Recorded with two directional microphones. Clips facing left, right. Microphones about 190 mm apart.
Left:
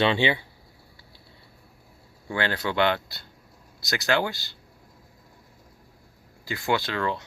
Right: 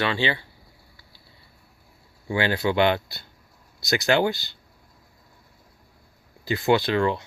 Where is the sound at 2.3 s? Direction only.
15° right (ahead or behind).